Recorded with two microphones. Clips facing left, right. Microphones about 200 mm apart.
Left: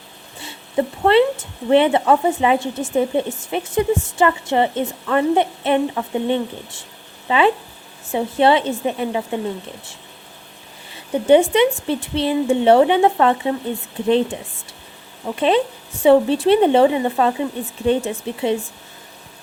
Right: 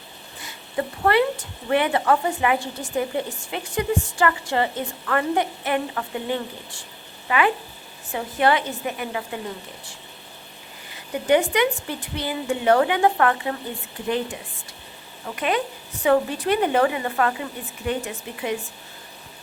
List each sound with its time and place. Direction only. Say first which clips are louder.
0.3 s speech: left 7 dB; 25° left (ahead or behind)
10.9 s a sound: left 7 dB; 25° left (ahead or behind)
11.5 s speech: left 6 dB; 25° left (ahead or behind)
15.4 s speech: left 7 dB; 25° left (ahead or behind)